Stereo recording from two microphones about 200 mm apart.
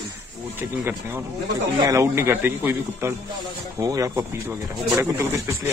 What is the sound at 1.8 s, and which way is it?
Speech, 15° right (ahead or behind).